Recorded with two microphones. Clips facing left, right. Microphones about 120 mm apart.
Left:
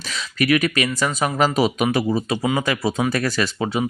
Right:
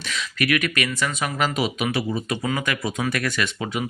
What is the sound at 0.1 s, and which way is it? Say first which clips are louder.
Speech: left 4 dB; 35° left (ahead or behind).